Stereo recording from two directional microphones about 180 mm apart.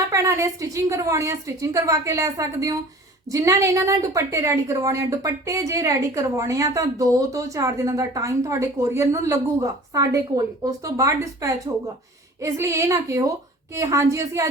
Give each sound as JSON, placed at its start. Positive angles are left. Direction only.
{"t": 0.1, "sound": "a woman's voice", "side_deg": -15}